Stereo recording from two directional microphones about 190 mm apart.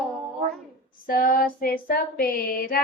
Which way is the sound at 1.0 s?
50° left (ahead or behind).